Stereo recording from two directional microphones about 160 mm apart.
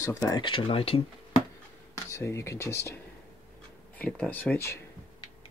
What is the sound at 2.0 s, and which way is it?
Speech, 20° left (ahead or behind).